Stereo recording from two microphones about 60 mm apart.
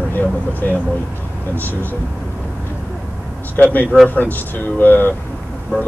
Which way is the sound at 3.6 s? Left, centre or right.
Left.